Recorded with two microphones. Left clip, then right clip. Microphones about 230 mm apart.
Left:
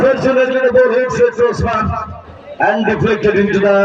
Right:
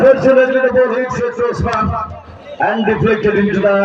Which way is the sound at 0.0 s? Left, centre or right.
Left.